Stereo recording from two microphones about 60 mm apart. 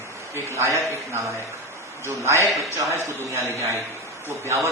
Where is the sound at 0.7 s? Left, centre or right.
Right.